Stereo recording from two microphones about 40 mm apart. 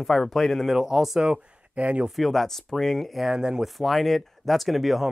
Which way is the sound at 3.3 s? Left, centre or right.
Centre.